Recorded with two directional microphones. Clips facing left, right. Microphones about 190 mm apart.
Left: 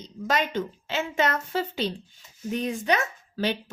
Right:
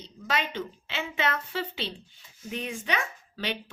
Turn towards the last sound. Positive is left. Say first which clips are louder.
# left 6 dB
turn(degrees=40)  # may be behind; listen again after turning